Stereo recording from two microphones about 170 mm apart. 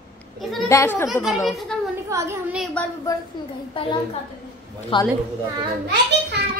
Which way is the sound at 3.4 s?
25° left (ahead or behind).